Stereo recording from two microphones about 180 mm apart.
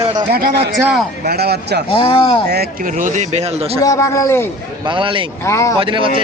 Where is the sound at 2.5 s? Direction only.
55° right (ahead or behind); by 3.7 s 35° right (ahead or behind).